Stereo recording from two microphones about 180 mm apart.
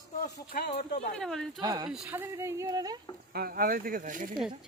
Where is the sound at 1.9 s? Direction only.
10° right (ahead or behind).